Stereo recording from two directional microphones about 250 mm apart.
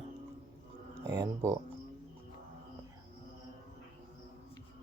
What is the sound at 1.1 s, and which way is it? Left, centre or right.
Speech, centre.